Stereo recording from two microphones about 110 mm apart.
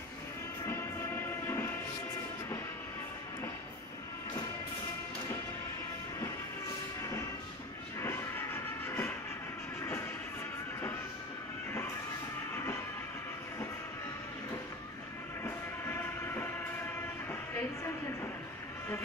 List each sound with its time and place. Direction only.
0.7 s train: 20° left (ahead or behind)
8.0 s music: 20° left (ahead or behind)
15.4 s a sound: 20° left (ahead or behind)
17.3 s music: 20° left (ahead or behind)